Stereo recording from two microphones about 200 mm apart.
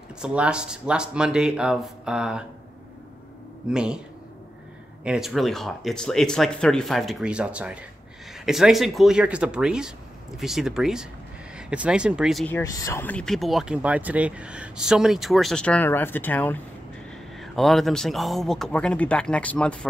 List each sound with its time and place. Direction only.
0.2 s speech: 5° right (ahead or behind)
3.6 s speech: 5° right (ahead or behind)
5.0 s speech: 5° right (ahead or behind)
12.5 s speech: 15° left (ahead or behind)